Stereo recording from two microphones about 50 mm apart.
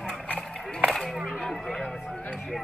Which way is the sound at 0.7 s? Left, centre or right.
Centre.